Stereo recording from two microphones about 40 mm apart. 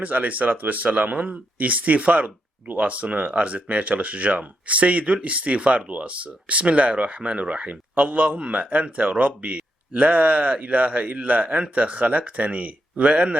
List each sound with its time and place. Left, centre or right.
0.0 s speech: right